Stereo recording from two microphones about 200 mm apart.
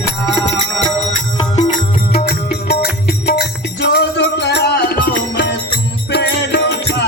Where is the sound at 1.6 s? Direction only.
45° left (ahead or behind).